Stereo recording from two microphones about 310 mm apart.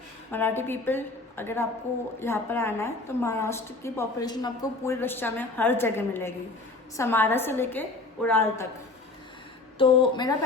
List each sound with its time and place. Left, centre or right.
0.3 s a woman's voice: centre
9.7 s a woman's voice: centre